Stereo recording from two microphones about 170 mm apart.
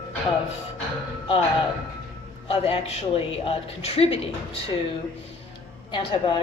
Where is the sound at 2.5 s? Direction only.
35° left (ahead or behind).